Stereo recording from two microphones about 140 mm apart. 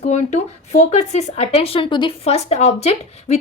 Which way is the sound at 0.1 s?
55° left (ahead or behind).